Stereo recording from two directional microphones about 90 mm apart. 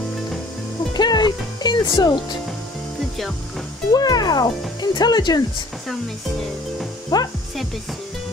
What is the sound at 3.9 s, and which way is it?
Speech, 50° left (ahead or behind).